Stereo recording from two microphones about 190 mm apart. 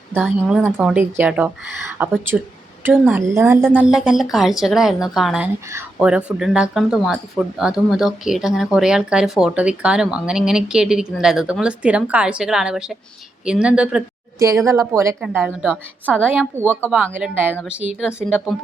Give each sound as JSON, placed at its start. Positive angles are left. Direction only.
{"t": 0.1, "sound": "a woman's voice", "side_deg": -10}
{"t": 14.3, "sound": "a woman's voice", "side_deg": -15}